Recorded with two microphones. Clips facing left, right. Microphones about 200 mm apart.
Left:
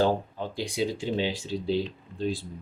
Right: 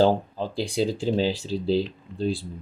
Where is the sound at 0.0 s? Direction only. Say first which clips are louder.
Right 4 dB; 30° right (ahead or behind).